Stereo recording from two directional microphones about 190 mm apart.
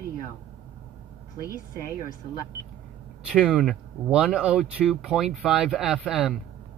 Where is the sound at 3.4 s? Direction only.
Centre (ahead or behind).